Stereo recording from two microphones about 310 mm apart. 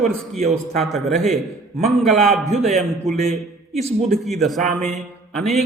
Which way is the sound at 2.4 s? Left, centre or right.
Right.